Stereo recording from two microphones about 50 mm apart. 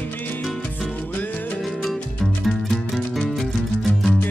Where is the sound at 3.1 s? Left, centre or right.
Centre.